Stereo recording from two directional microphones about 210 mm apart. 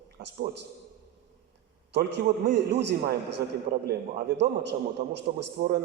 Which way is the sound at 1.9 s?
55° right (ahead or behind).